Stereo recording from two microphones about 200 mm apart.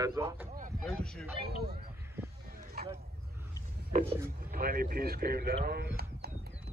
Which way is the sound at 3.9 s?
45° right (ahead or behind).